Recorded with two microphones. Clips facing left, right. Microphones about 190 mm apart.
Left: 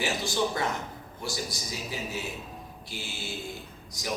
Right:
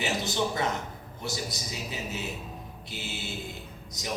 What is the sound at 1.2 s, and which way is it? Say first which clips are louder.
A man's voice: even; 20° right (ahead or behind).